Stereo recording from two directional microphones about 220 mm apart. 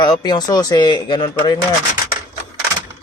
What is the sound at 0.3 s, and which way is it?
Speech, 20° left (ahead or behind).